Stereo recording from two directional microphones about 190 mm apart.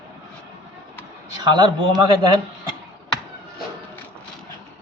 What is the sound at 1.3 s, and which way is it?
Speech, 20° right (ahead or behind).